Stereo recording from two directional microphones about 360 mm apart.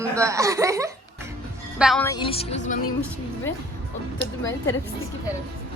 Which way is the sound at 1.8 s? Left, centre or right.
Centre.